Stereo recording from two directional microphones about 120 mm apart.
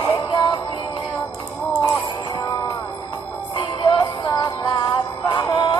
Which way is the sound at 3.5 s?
40° left (ahead or behind).